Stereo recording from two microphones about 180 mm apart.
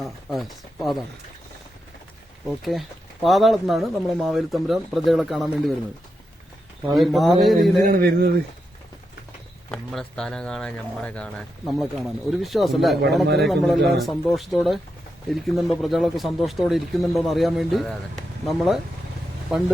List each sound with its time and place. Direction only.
0.0 s speech: centre (ahead or behind)
3.2 s speech: centre (ahead or behind)
6.8 s speech: centre (ahead or behind)
7.9 s speech: 55° right (ahead or behind)
9.6 s speech: 5° left (ahead or behind)